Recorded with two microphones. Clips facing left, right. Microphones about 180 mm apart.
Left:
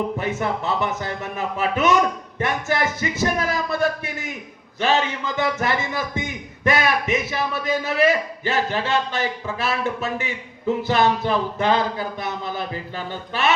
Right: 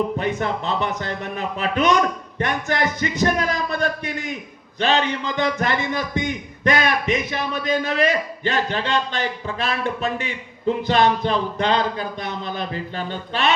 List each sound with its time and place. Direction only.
0.2 s a man's voice: 15° right (ahead or behind)